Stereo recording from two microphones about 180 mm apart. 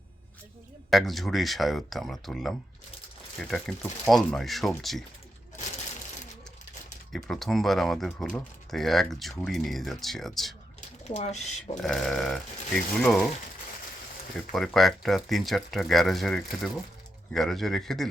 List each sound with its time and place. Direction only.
0.9 s speech: centre (ahead or behind)
7.1 s speech: centre (ahead or behind)
10.8 s a sound: 40° left (ahead or behind)
11.3 s speech: centre (ahead or behind)
14.3 s speech: centre (ahead or behind)